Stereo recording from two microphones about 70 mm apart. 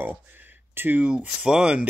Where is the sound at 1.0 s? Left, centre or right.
Centre.